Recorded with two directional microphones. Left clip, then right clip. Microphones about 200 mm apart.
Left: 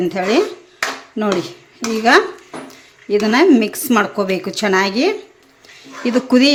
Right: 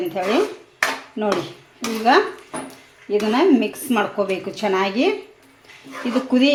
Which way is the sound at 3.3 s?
35° left (ahead or behind).